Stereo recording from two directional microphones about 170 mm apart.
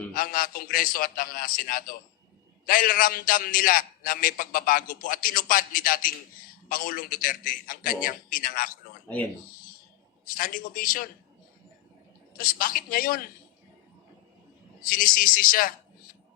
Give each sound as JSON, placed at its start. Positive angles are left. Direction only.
{"t": 0.1, "sound": "a man's voice", "side_deg": 55}
{"t": 10.3, "sound": "a man's voice", "side_deg": 55}
{"t": 12.4, "sound": "a man's voice", "side_deg": 55}
{"t": 14.8, "sound": "a man's voice", "side_deg": 55}